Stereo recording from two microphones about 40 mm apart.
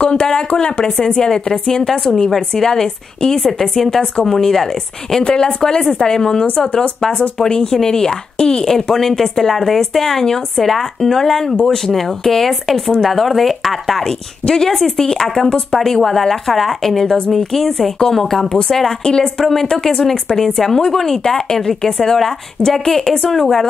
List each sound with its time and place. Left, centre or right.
0.0 s a sound: left
0.6 s speech: left
4.4 s speech: centre
5.2 s speech: centre
14.4 s speech: centre
19.0 s speech: centre
19.3 s speech: centre